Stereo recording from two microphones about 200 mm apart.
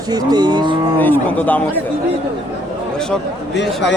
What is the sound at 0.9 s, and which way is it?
Speech, 10° left (ahead or behind).